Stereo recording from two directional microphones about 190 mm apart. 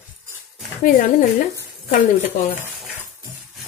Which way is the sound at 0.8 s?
45° left (ahead or behind).